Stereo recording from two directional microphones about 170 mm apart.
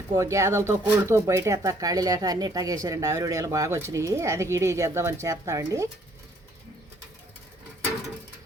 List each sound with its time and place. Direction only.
0.1 s speech: 20° right (ahead or behind)